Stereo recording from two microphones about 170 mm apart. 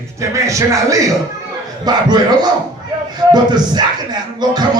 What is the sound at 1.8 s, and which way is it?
Music, 25° right (ahead or behind).